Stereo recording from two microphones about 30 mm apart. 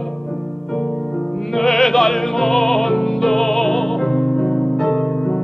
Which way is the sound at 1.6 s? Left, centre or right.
Centre.